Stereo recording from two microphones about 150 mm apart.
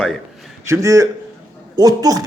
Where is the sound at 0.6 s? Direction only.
20° right (ahead or behind).